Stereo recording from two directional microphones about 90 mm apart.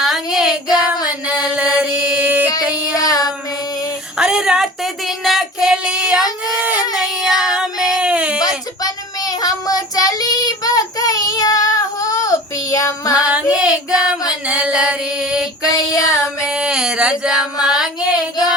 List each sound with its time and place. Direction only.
0.0 s child singing: 5° right (ahead or behind)
1.4 s chant: 10° right (ahead or behind)
2.6 s music: 15° right (ahead or behind)
2.9 s a sound: 45° left (ahead or behind)
4.2 s child singing: 10° right (ahead or behind)
8.4 s child singing: 45° left (ahead or behind)
13.3 s child singing: 10° right (ahead or behind)
14.4 s female singing: 10° right (ahead or behind)
15.6 s female singing: 40° left (ahead or behind)
16.5 s a sound: 10° right (ahead or behind)